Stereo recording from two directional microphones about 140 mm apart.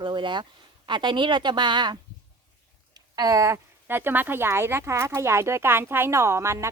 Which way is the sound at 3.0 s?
25° right (ahead or behind).